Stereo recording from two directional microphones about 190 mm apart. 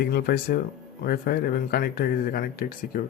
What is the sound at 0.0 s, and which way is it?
Speech, 55° left (ahead or behind).